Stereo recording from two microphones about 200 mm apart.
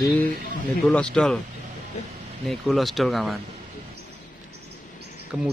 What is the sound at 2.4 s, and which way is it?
Speech, centre (ahead or behind).